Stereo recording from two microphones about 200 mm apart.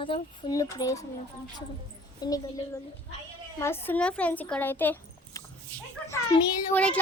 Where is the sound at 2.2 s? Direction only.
20° left (ahead or behind).